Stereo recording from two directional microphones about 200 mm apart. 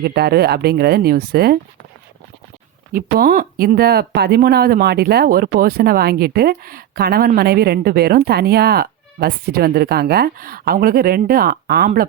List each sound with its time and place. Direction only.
0.0 s speech: 55° right (ahead or behind)
2.9 s speech: 50° right (ahead or behind)